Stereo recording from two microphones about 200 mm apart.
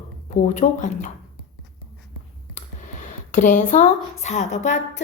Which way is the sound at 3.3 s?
35° left (ahead or behind).